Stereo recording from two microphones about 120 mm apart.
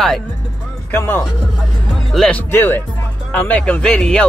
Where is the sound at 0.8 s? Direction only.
20° left (ahead or behind).